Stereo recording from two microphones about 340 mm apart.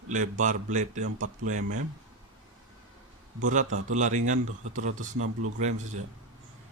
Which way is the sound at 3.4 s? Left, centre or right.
Right.